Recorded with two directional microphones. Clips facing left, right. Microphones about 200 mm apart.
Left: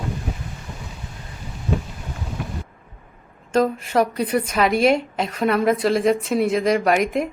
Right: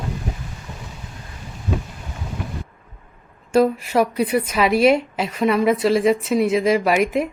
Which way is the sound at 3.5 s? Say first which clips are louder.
Right 2 dB; 10° right (ahead or behind).